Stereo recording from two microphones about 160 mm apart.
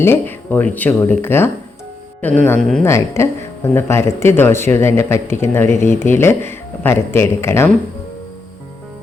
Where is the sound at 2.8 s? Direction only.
15° left (ahead or behind).